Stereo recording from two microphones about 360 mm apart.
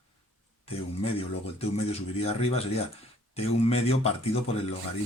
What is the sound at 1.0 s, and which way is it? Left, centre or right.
Speech, centre.